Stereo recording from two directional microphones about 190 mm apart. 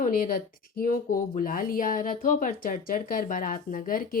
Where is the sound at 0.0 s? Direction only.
45° left (ahead or behind).